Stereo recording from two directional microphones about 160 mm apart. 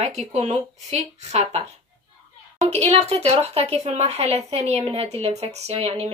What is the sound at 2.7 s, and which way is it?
A woman's voice, 40° right (ahead or behind).